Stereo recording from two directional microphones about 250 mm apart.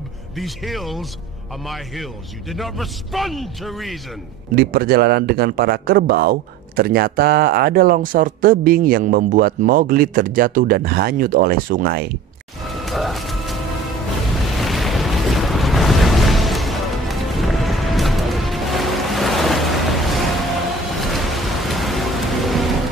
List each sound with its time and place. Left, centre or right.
0.4 s a man's voice: centre
2.5 s a man's voice: centre
4.6 s speech: right
12.8 s music: centre
14.4 s boat: centre
21.0 s rain: centre